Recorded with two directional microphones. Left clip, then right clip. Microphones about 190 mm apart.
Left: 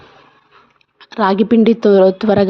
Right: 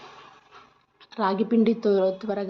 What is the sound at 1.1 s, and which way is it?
Speech, 35° left (ahead or behind).